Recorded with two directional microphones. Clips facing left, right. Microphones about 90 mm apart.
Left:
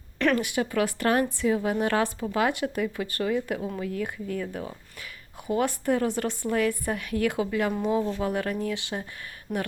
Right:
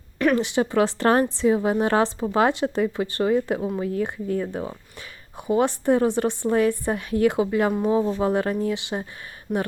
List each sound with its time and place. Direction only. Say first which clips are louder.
0.3 s a woman's voice: right 5 dB; 25° right (ahead or behind)
9.5 s speech: right 5 dB; centre (ahead or behind)